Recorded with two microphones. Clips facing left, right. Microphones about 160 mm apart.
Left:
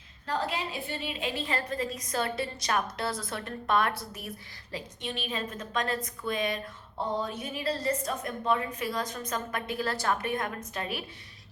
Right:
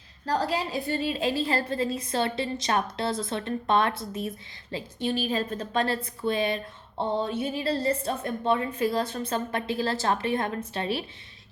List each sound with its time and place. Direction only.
0.3 s a woman's voice: 35° right (ahead or behind)